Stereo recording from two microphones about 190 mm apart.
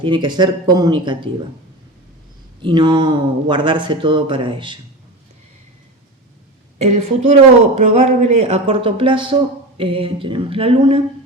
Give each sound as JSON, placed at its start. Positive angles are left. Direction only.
{"t": 0.0, "sound": "speech", "side_deg": -25}
{"t": 2.6, "sound": "speech", "side_deg": -25}
{"t": 6.7, "sound": "speech", "side_deg": -35}